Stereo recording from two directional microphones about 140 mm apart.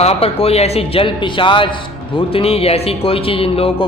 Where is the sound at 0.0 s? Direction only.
45° left (ahead or behind).